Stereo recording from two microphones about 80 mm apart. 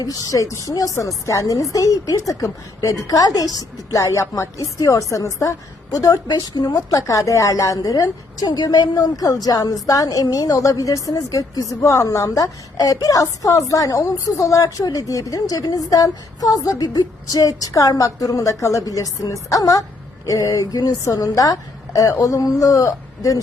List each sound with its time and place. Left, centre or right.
0.0 s a woman's voice: left